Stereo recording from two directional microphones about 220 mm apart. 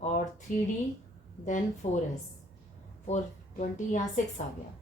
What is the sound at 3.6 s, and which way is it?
Speech, 35° left (ahead or behind).